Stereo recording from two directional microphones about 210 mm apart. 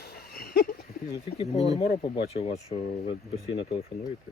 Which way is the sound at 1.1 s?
25° left (ahead or behind).